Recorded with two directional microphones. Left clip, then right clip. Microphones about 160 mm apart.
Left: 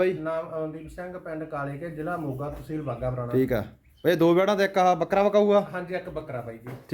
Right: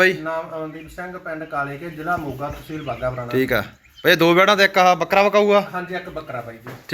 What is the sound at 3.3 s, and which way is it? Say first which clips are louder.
Speech: right 5 dB; 15° left (ahead or behind).